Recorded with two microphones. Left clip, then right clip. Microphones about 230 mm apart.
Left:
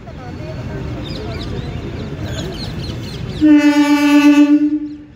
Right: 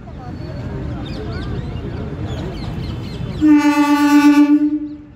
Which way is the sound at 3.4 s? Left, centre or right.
Centre.